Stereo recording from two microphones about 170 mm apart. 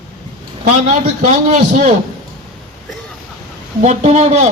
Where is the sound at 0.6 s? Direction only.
45° right (ahead or behind).